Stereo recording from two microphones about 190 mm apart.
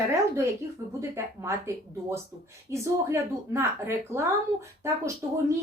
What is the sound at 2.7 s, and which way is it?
A woman's voice, 15° right (ahead or behind).